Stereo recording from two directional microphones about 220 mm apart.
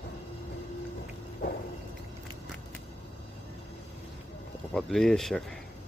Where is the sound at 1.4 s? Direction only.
45° left (ahead or behind).